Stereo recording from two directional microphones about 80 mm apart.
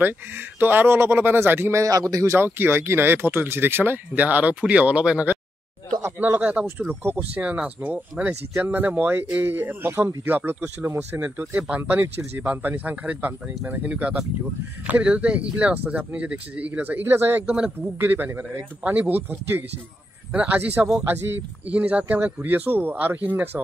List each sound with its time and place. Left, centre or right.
0.6 s speech: right
1.8 s speech: right
2.3 s speech: right
6.0 s speech: right
6.4 s speech: centre
17.5 s speech: centre
17.9 s speech: right